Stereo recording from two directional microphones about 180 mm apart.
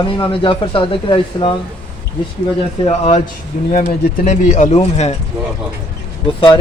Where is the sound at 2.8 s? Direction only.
40° left (ahead or behind).